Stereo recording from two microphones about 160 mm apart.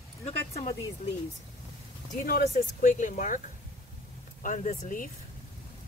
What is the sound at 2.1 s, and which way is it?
Speech, 60° left (ahead or behind).